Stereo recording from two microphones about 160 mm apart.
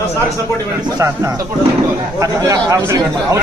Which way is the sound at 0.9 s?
20° right (ahead or behind).